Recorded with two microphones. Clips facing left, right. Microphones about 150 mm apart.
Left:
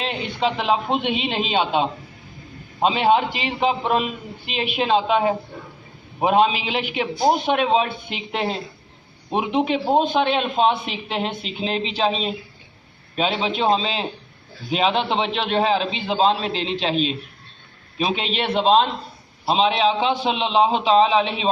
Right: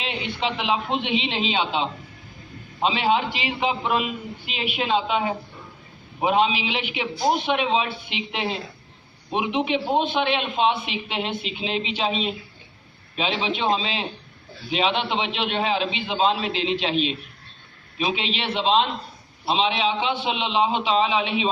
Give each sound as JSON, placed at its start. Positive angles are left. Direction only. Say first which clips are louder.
{"t": 0.0, "sound": "a man's voice", "louder": "left 4 dB", "side_deg": 40}